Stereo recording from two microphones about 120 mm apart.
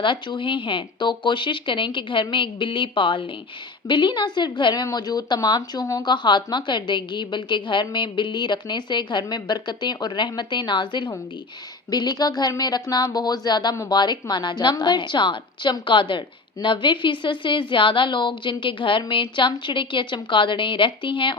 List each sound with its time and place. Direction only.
0.0 s speech: 40° left (ahead or behind)